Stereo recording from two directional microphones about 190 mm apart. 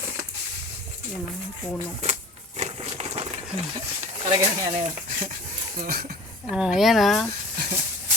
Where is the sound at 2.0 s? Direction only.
35° right (ahead or behind).